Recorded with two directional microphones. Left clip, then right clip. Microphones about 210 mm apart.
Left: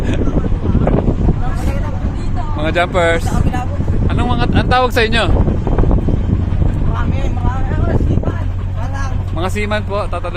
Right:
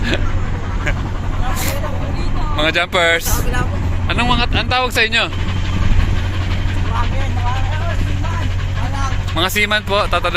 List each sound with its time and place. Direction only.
2.6 s speech: 5° left (ahead or behind)
9.4 s speech: 5° left (ahead or behind)